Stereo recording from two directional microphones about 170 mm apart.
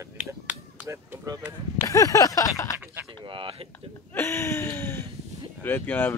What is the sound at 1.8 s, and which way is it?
Speech, 20° left (ahead or behind).